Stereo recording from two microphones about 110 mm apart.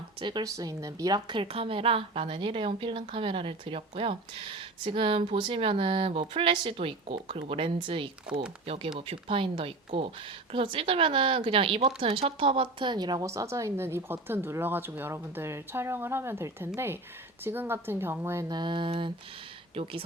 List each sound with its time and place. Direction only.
0.2 s speech: 45° right (ahead or behind)
0.4 s speech: 30° right (ahead or behind); by 11.8 s 55° right (ahead or behind)
11.8 s a woman's voice: 75° right (ahead or behind); by 18.4 s 25° right (ahead or behind)
18.4 s speech: 45° right (ahead or behind)